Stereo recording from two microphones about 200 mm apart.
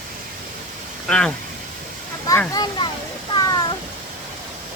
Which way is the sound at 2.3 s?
20° left (ahead or behind).